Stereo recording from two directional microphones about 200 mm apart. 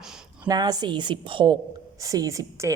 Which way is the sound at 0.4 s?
20° right (ahead or behind).